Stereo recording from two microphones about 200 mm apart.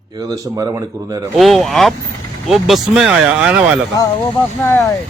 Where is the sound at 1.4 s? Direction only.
Centre (ahead or behind).